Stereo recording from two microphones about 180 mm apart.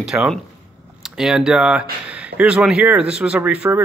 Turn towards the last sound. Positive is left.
turn(degrees=-5)  # may be behind; listen again after turning